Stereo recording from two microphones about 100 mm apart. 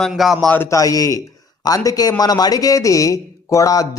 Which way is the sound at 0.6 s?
35° left (ahead or behind).